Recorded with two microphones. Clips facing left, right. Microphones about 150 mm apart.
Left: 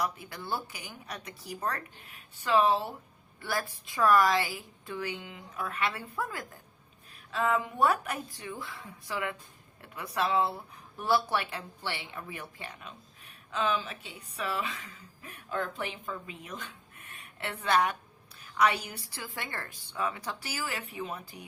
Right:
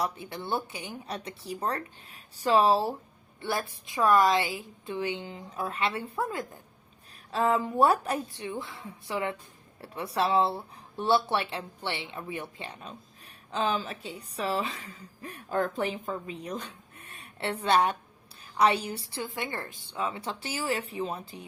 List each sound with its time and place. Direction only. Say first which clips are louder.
0.0 s a woman's voice: right 2 dB; 25° right (ahead or behind)
3.4 s a woman's voice: right 2 dB; 25° right (ahead or behind)
7.3 s a woman's voice: right 3 dB; 35° right (ahead or behind)